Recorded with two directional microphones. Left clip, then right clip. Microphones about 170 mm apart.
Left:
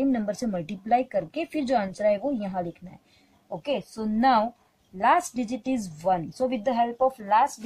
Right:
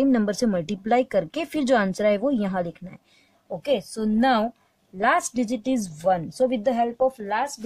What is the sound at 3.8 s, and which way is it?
Speech, 45° right (ahead or behind).